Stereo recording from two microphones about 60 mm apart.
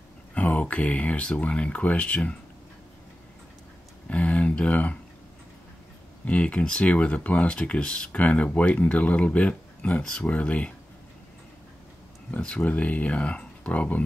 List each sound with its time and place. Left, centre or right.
0.3 s speech: left
4.1 s speech: left
6.2 s speech: left
12.4 s speech: centre